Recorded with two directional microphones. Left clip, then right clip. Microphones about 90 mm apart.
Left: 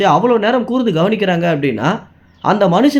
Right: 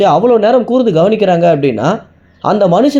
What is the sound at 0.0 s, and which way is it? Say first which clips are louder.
Speech: right 4 dB; 25° right (ahead or behind).